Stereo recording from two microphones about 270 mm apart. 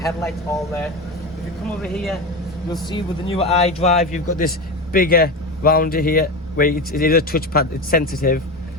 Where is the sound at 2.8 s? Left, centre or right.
Centre.